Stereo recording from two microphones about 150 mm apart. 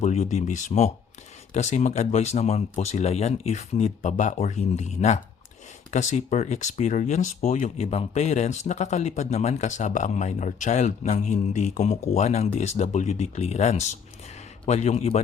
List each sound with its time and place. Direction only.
0.0 s speech: 50° left (ahead or behind)